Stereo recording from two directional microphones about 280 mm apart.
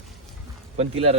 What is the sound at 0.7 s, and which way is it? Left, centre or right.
Speech, right.